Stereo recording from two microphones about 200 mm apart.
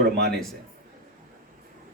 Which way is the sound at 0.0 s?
55° right (ahead or behind).